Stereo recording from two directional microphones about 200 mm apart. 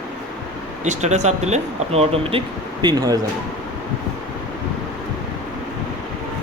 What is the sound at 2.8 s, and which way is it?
Speech, 20° right (ahead or behind).